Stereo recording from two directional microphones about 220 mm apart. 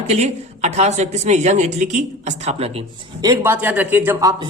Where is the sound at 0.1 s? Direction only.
30° right (ahead or behind).